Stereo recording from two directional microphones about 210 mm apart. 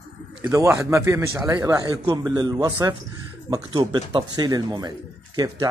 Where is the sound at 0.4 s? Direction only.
15° right (ahead or behind).